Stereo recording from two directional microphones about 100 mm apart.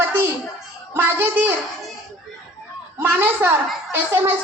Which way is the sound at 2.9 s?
20° right (ahead or behind).